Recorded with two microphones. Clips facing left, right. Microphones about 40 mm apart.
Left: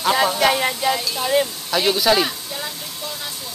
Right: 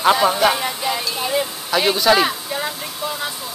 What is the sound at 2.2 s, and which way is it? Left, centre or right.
Music, centre.